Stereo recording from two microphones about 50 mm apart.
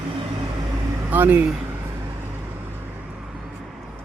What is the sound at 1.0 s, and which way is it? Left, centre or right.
Speech, right.